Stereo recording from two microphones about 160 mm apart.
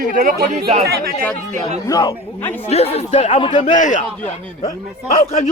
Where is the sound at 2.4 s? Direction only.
10° left (ahead or behind).